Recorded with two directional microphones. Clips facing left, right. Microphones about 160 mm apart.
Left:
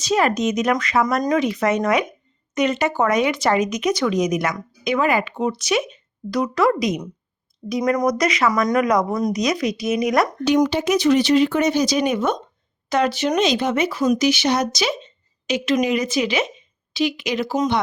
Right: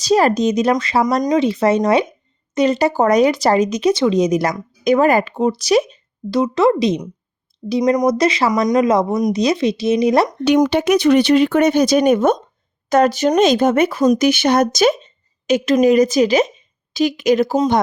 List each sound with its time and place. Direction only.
0.0 s speech: 35° right (ahead or behind)
10.4 s speech: 65° right (ahead or behind); by 17.5 s 45° right (ahead or behind)